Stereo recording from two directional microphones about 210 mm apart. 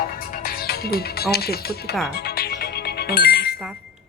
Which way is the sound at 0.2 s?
40° left (ahead or behind).